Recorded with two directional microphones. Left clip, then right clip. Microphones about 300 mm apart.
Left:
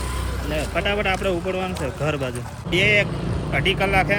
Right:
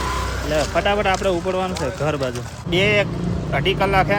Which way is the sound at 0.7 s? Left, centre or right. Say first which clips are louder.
Right 2 dB; centre.